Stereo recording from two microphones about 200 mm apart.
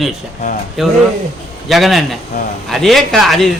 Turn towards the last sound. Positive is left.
turn(degrees=0)  # may be behind; listen again after turning